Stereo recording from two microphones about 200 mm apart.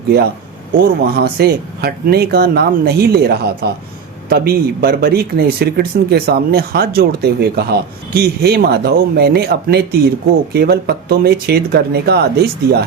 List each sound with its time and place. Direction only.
1.1 s speech: 50° right (ahead or behind)